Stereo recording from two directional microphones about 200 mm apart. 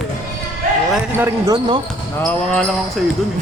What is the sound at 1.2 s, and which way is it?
Speech, 20° right (ahead or behind).